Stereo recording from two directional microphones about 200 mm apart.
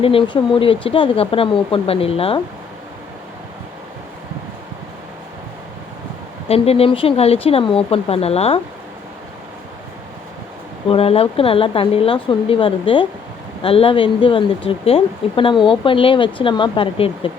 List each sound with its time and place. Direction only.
0.0 s speech: 25° left (ahead or behind)
6.5 s speech: 30° left (ahead or behind)
10.8 s speech: 30° left (ahead or behind)